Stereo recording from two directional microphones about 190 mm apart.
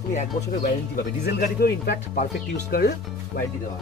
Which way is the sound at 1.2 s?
55° left (ahead or behind).